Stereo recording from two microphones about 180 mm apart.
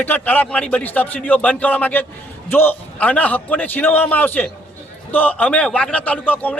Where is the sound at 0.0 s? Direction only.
10° left (ahead or behind).